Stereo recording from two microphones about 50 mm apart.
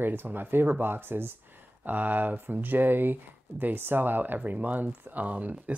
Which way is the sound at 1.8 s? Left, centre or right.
Right.